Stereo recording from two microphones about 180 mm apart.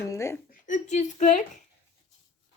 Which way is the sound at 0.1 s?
15° left (ahead or behind).